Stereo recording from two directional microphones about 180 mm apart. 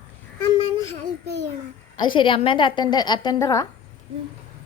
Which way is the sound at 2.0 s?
25° left (ahead or behind).